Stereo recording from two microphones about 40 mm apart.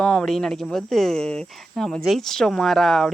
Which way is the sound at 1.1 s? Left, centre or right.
Centre.